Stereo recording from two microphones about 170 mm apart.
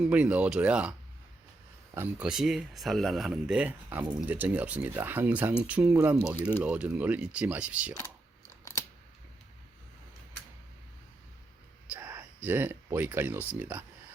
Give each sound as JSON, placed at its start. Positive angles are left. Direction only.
{"t": 0.0, "sound": "speech", "side_deg": -5}
{"t": 2.0, "sound": "speech", "side_deg": -5}
{"t": 8.7, "sound": "scissors", "side_deg": 20}
{"t": 11.9, "sound": "a sound", "side_deg": -10}
{"t": 13.6, "sound": "speech", "side_deg": -10}